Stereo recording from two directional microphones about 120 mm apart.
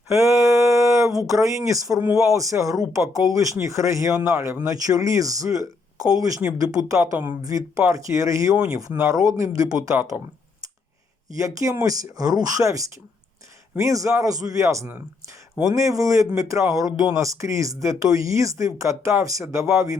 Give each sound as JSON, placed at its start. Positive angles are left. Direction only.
{"t": 0.1, "sound": "a sound", "side_deg": -25}
{"t": 1.3, "sound": "a man's voice", "side_deg": -25}
{"t": 11.3, "sound": "a man's voice", "side_deg": -25}